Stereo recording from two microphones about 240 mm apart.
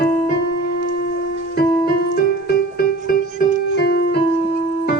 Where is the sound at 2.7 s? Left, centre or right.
Left.